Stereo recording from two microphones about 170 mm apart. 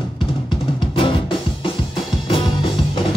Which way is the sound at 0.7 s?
30° left (ahead or behind).